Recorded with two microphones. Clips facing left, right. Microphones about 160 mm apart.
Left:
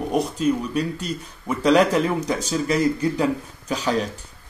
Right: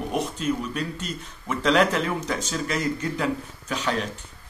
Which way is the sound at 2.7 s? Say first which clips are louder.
Left 7 dB; 35° left (ahead or behind).